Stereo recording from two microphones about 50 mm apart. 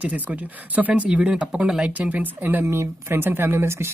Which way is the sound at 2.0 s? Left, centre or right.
Right.